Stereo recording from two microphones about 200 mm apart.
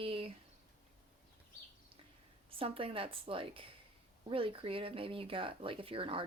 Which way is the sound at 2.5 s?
25° right (ahead or behind).